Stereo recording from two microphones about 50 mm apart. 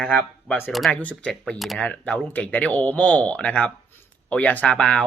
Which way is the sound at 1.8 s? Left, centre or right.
Left.